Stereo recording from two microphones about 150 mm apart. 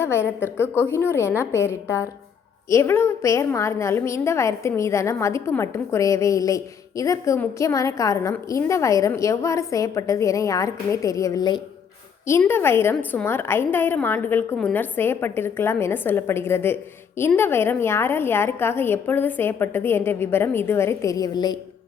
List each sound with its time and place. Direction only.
0.0 s a woman's voice: 15° left (ahead or behind)
12.4 s a woman's voice: 15° left (ahead or behind)